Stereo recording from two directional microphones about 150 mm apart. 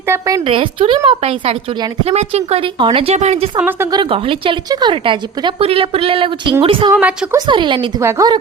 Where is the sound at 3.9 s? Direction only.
35° right (ahead or behind).